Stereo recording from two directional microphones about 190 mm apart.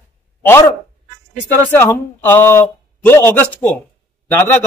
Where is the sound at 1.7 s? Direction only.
10° left (ahead or behind).